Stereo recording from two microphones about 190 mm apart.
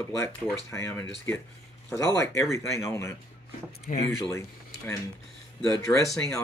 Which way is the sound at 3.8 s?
30° left (ahead or behind).